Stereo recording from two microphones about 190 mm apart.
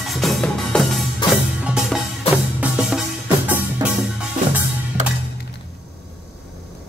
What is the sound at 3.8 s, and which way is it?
Music, 20° right (ahead or behind).